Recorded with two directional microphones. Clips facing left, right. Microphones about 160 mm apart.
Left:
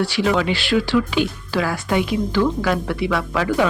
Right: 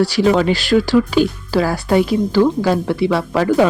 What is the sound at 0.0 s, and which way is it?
Speech, 40° right (ahead or behind).